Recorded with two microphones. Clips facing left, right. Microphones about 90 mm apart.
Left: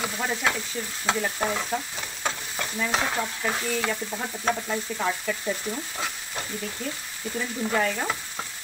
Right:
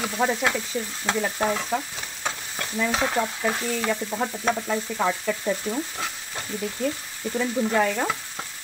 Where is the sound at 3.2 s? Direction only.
10° right (ahead or behind).